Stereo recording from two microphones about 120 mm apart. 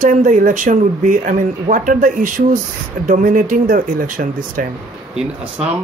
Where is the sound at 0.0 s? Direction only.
90° right.